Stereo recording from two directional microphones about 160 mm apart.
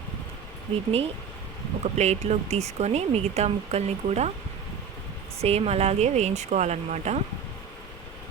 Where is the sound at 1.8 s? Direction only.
45° right (ahead or behind).